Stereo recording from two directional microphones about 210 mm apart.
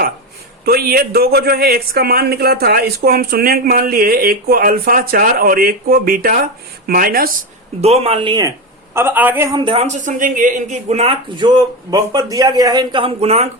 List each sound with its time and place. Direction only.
0.6 s a man's voice: 45° right (ahead or behind)
7.8 s a woman's voice: 30° right (ahead or behind)
9.0 s a woman's voice: 10° right (ahead or behind); by 13.5 s 30° right (ahead or behind)